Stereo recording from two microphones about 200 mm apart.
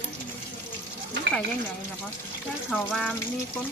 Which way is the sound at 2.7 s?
5° left (ahead or behind).